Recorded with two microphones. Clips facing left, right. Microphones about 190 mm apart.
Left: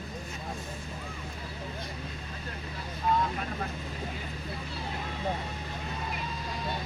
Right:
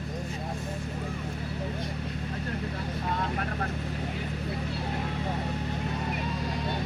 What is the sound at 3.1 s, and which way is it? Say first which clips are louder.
Vehicle: left 4 dB; 65° right (ahead or behind).